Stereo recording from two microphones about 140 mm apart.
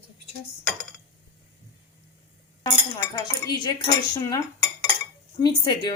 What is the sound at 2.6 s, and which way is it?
Speech, 25° left (ahead or behind).